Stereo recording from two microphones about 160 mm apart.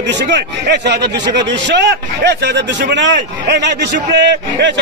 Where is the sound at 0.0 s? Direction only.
90° right.